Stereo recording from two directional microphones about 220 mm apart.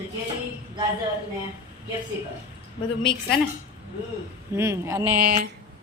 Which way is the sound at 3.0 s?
50° left (ahead or behind).